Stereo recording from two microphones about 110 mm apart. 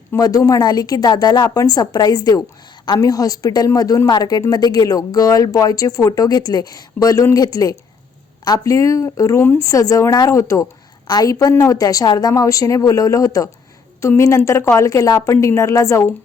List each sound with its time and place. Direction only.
0.2 s a woman's voice: 35° left (ahead or behind)